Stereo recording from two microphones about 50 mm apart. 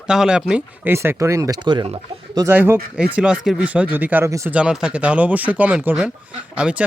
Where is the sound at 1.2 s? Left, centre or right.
Right.